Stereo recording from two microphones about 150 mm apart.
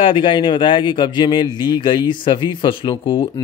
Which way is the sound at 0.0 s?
35° left (ahead or behind).